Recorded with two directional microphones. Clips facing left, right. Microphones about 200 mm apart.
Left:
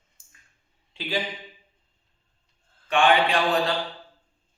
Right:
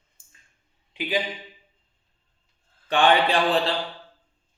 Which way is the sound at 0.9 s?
15° right (ahead or behind).